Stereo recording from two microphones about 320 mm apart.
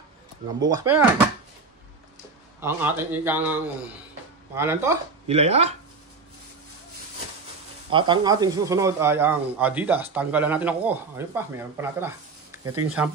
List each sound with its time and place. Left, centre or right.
0.6 s speech: centre
2.6 s a man's voice: centre
5.3 s speech: centre
7.9 s a man's voice: centre